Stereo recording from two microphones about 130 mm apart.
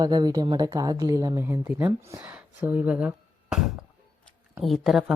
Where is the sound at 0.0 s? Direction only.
30° right (ahead or behind).